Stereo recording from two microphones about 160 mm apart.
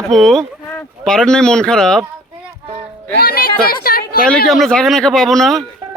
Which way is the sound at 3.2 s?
70° left (ahead or behind).